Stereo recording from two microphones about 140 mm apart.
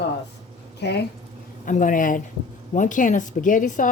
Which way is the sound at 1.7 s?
70° left (ahead or behind).